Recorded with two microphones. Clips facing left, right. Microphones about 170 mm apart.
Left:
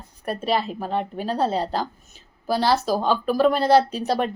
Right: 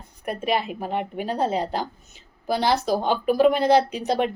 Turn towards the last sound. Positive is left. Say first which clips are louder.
# even
turn(degrees=-20)  # may be behind; listen again after turning